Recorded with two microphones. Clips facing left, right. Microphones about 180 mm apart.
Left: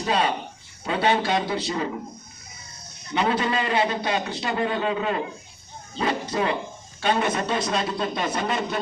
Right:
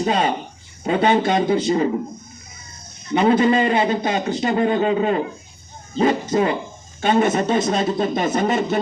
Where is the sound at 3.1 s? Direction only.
45° right (ahead or behind).